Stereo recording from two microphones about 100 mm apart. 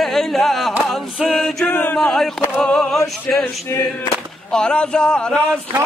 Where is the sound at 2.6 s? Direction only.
10° left (ahead or behind).